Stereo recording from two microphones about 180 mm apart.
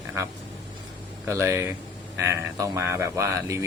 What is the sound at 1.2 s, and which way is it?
Speech, 15° right (ahead or behind).